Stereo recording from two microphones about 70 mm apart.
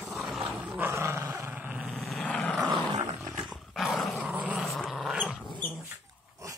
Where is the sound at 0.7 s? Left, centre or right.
Right.